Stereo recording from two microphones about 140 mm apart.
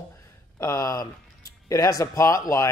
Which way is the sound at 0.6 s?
25° left (ahead or behind).